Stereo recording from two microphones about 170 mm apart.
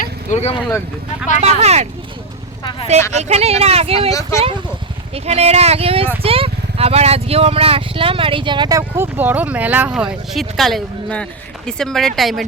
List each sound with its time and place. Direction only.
0.0 s vehicle: 45° left (ahead or behind)
1.5 s speech: 40° right (ahead or behind)
3.1 s speech: 40° right (ahead or behind)
4.1 s speech: 20° left (ahead or behind)
5.1 s speech: 40° right (ahead or behind)
9.0 s speech: 10° right (ahead or behind)